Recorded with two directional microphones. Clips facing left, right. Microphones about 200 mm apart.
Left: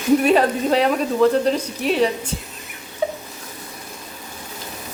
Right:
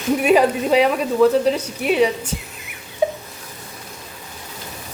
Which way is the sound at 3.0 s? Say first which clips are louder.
Right 3 dB; 15° right (ahead or behind).